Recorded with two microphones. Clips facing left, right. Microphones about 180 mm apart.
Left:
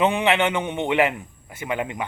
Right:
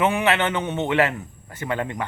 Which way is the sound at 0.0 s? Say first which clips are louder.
Left 1 dB; 15° left (ahead or behind).